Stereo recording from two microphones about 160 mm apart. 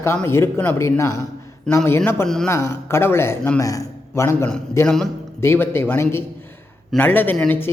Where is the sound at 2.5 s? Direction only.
20° left (ahead or behind).